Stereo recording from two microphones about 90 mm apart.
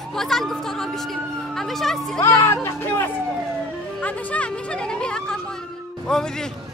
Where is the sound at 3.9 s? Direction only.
15° left (ahead or behind).